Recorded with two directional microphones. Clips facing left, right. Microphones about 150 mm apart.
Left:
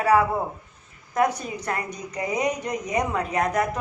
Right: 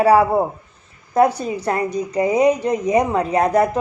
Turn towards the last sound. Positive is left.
turn(degrees=-30)  # may be behind; listen again after turning